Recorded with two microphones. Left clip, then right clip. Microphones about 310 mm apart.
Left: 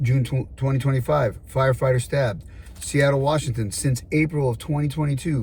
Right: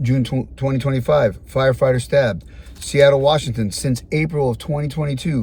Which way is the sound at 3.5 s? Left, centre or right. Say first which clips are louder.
Right 5 dB; centre.